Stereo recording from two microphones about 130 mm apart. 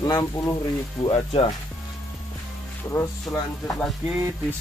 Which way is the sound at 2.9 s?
25° left (ahead or behind).